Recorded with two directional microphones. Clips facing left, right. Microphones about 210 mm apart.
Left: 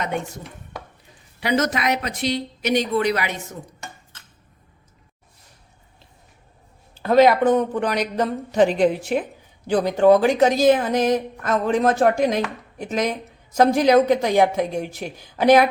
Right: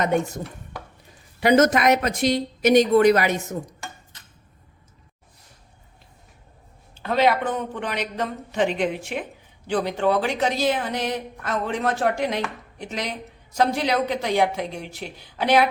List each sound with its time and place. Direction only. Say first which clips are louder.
1.4 s speech: right 5 dB; 50° right (ahead or behind)
6.9 s a woman's voice: left 6 dB; 40° left (ahead or behind)